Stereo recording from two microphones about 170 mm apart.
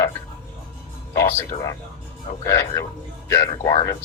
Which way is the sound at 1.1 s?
15° left (ahead or behind).